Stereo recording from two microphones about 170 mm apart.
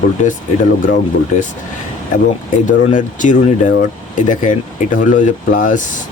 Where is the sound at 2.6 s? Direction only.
50° left (ahead or behind).